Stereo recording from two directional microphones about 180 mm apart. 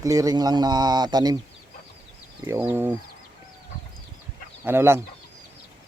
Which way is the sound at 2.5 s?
15° right (ahead or behind).